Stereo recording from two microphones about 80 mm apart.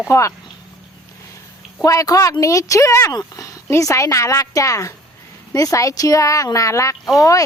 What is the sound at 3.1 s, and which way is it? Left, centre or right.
A woman's voice, left.